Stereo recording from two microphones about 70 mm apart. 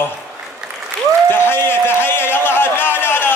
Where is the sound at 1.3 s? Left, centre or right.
Left.